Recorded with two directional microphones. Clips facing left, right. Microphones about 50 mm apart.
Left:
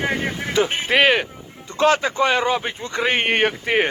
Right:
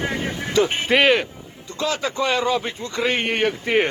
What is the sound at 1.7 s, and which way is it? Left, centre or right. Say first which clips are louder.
A man's voice: left 7 dB; left.